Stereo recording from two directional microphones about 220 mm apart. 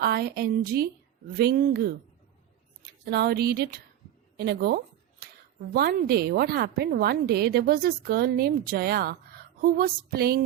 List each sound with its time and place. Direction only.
0.0 s a woman's voice: 45° right (ahead or behind)
3.0 s a woman's voice: 45° right (ahead or behind)